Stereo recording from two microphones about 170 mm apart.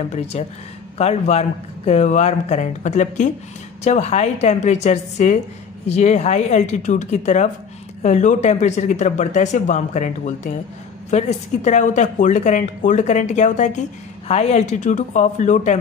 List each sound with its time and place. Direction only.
0.1 s speech: 40° left (ahead or behind)